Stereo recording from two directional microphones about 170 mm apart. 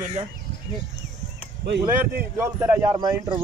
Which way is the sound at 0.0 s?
40° right (ahead or behind).